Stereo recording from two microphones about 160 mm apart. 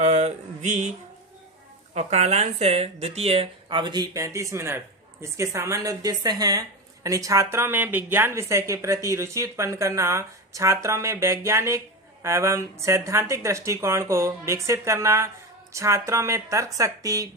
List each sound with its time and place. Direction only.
0.0 s mantra: 45° right (ahead or behind)
2.0 s speech: 45° right (ahead or behind); by 17.2 s 20° right (ahead or behind)